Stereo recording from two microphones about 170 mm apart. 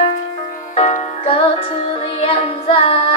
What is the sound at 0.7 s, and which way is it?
Music, 45° left (ahead or behind).